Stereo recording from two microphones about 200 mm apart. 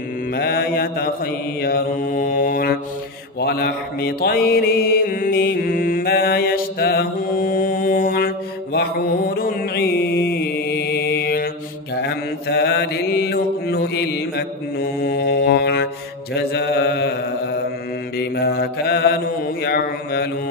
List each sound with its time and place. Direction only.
0.3 s mantra: 50° left (ahead or behind)